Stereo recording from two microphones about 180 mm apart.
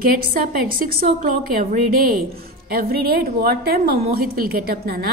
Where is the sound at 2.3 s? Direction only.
55° right (ahead or behind).